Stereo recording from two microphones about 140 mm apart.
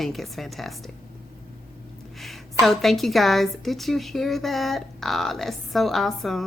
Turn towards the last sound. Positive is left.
turn(degrees=0)  # may be behind; listen again after turning